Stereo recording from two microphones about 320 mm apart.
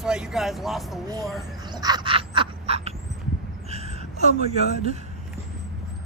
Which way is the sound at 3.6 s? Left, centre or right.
Centre.